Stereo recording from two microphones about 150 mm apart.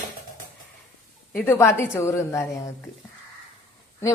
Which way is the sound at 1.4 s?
15° left (ahead or behind).